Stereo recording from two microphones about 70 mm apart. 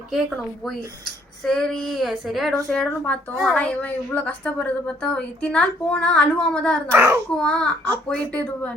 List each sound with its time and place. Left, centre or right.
0.1 s speech: centre
2.7 s a woman's voice: centre
6.9 s a child's voice: right
7.3 s a woman's voice: centre